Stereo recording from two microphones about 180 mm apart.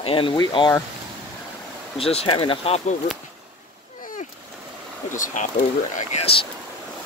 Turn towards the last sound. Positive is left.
turn(degrees=35)  # may be behind; listen again after turning